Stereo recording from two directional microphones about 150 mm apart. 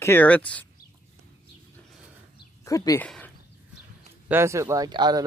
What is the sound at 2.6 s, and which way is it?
Speech, 20° left (ahead or behind).